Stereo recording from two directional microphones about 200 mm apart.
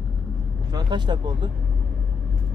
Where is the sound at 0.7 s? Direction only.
20° right (ahead or behind).